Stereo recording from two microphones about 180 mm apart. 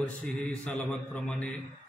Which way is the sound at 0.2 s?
5° left (ahead or behind).